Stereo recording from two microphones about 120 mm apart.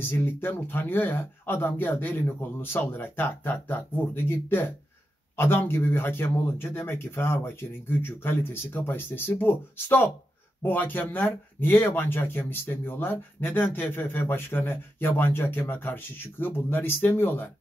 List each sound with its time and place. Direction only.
0.0 s speech: 20° left (ahead or behind)